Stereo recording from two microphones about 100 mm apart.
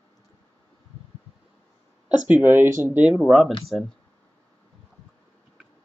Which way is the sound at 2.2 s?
20° right (ahead or behind).